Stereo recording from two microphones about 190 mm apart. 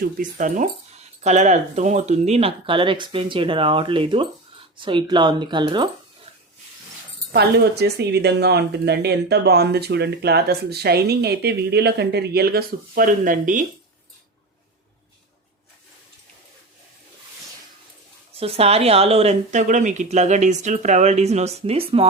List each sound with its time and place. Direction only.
0.0 s speech: 45° right (ahead or behind); by 5.9 s 25° right (ahead or behind)
7.3 s speech: 60° right (ahead or behind)
18.3 s speech: 30° right (ahead or behind)